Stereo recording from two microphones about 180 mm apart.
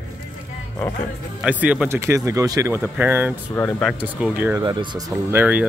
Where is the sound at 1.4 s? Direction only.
10° right (ahead or behind).